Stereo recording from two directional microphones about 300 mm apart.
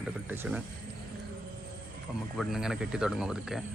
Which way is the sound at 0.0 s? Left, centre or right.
Centre.